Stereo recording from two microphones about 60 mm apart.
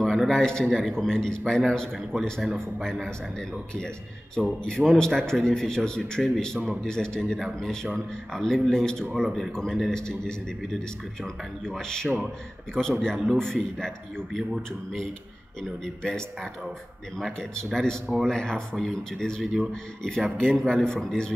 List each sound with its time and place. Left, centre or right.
0.0 s a sound: centre
0.7 s a man's voice: centre
6.6 s a man's voice: centre
6.9 s a man's voice: centre
11.8 s a man's voice: centre
15.8 s a man's voice: centre
19.7 s a man's voice: centre